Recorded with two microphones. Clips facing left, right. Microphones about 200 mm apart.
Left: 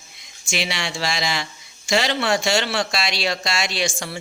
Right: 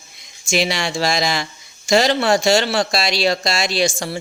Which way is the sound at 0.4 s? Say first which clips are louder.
Right 7 dB; 40° right (ahead or behind).